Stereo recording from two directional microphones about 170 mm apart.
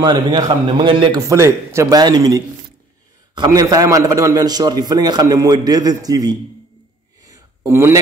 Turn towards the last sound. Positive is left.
turn(degrees=-15)  # may be behind; listen again after turning